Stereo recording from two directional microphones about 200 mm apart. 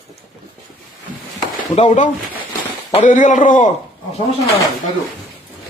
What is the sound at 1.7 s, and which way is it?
Speech, 35° left (ahead or behind).